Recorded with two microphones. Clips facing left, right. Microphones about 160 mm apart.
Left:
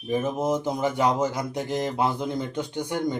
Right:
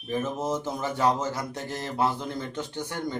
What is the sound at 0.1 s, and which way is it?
Speech, 15° left (ahead or behind).